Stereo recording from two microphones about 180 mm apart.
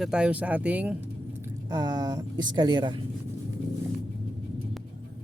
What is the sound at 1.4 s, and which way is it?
Speech, 20° right (ahead or behind).